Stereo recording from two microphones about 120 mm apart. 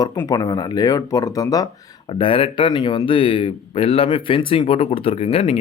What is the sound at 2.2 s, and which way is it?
Speech, 45° left (ahead or behind).